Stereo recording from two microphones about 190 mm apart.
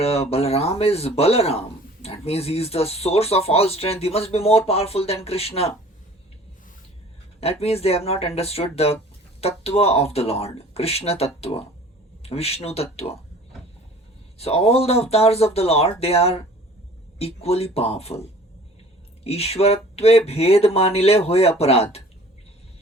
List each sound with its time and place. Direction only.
0.0 s speech: 30° left (ahead or behind)
7.4 s speech: 30° left (ahead or behind)
14.3 s speech: 30° left (ahead or behind)